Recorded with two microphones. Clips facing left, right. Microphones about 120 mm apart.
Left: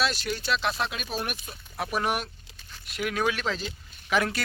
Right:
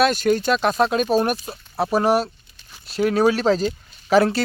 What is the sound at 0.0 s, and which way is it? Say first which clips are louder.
Speech: right 11 dB; 50° right (ahead or behind).